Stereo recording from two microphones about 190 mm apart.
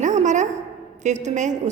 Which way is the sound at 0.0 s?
40° right (ahead or behind).